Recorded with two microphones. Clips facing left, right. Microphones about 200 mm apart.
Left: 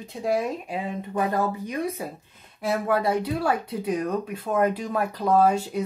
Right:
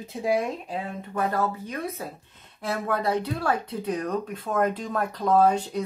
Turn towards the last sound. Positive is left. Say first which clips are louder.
# even
turn(degrees=10)  # may be behind; listen again after turning